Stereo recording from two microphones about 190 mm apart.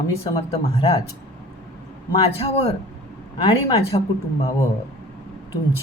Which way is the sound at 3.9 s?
25° left (ahead or behind).